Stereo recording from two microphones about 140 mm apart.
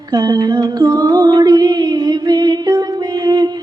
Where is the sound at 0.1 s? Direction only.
30° right (ahead or behind).